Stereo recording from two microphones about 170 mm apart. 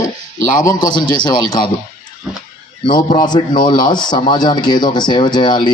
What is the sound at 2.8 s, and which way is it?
Speech, 25° left (ahead or behind).